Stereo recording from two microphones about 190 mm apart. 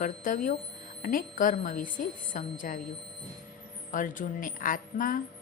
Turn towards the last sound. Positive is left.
turn(degrees=45)  # may be behind; listen again after turning